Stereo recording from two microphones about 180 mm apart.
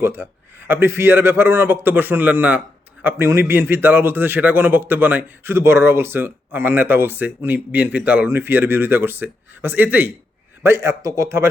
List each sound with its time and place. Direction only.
0.0 s a man's voice: 15° right (ahead or behind)